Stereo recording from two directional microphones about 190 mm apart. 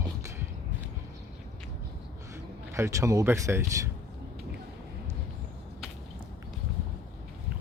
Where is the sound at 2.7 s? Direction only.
15° right (ahead or behind).